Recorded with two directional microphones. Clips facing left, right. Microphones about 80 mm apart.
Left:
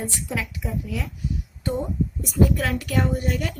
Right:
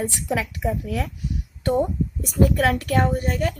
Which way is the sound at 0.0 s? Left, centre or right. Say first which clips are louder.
Right 4 dB; right.